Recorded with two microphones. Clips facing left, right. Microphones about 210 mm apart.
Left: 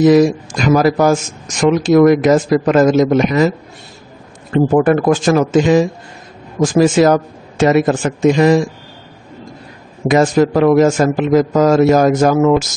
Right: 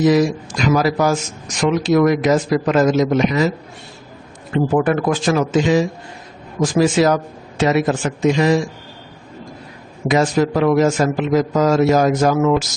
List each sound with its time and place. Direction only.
0.0 s a man's voice: 50° left (ahead or behind)
4.7 s a man's voice: 45° left (ahead or behind)
10.0 s a man's voice: 50° left (ahead or behind)